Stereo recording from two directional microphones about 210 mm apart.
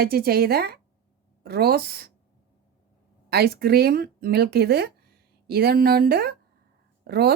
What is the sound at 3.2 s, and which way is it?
Speech, 50° right (ahead or behind).